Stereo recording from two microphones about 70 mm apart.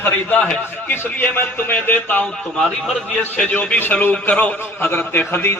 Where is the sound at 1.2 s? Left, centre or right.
Left.